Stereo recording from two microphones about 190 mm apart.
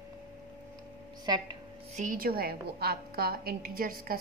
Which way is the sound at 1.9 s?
45° right (ahead or behind).